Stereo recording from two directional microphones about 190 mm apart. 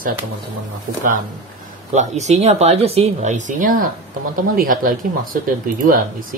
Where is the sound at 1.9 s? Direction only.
35° right (ahead or behind).